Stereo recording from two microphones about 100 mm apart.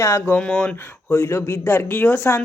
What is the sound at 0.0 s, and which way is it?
Speech, 25° left (ahead or behind).